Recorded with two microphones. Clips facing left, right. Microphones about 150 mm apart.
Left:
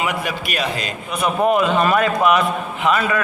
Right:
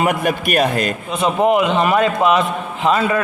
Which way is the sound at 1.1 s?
25° right (ahead or behind).